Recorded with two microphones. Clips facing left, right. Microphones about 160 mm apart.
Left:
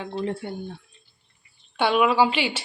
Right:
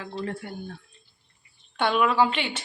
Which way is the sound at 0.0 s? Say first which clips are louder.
Left 4 dB; 20° left (ahead or behind).